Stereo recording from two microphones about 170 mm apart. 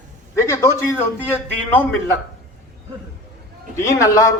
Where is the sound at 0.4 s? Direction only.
15° left (ahead or behind).